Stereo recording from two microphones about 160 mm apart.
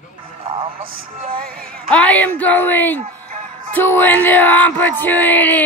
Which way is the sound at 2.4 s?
10° left (ahead or behind).